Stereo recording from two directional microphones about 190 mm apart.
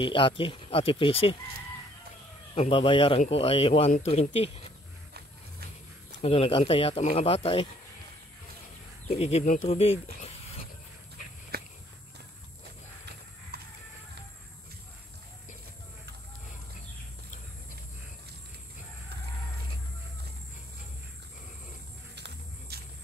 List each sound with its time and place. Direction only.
0.0 s speech: 25° left (ahead or behind)
2.5 s speech: 30° left (ahead or behind)
6.2 s speech: 30° left (ahead or behind)
9.1 s speech: 35° left (ahead or behind)
11.5 s walk: 55° right (ahead or behind)
13.5 s music: 55° right (ahead or behind)
22.1 s music: 65° right (ahead or behind)